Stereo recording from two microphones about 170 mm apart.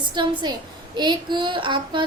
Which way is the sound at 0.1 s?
25° right (ahead or behind).